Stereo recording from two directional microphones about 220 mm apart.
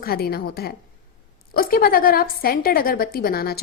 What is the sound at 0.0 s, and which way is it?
A woman's voice, 45° left (ahead or behind).